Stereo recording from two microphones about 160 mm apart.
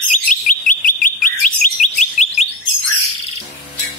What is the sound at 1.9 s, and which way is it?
Chirp, 45° left (ahead or behind).